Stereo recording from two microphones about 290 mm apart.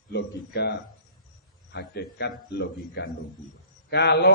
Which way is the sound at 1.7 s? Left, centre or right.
Left.